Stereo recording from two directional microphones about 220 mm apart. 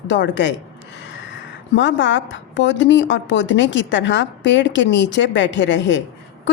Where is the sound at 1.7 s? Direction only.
55° left (ahead or behind).